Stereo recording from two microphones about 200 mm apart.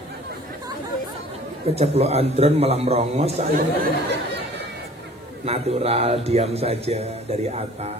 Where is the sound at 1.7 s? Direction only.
30° right (ahead or behind).